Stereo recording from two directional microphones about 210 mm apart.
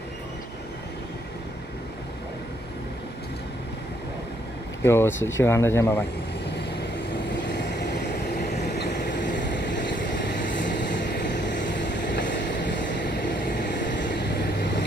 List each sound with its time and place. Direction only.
4.8 s speech: 10° left (ahead or behind)
7.5 s vehicle: 55° left (ahead or behind)